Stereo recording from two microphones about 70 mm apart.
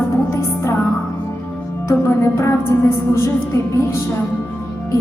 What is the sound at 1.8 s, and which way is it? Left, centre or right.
Music, left.